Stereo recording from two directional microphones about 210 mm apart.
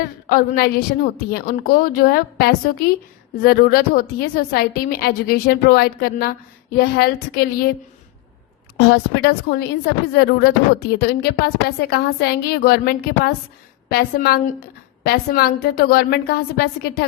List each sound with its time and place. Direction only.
0.3 s a woman's voice: 45° left (ahead or behind)
8.8 s a woman's voice: 50° left (ahead or behind)